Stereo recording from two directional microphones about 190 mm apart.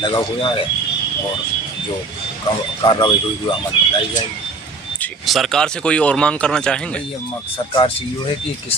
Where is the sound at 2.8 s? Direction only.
25° left (ahead or behind).